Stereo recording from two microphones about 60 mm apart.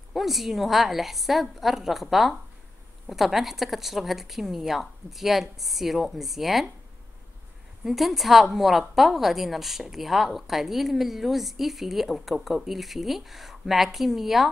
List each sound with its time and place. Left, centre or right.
0.1 s a woman's voice: centre
7.8 s a woman's voice: centre